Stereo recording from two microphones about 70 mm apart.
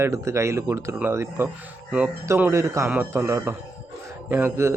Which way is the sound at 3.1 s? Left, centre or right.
Right.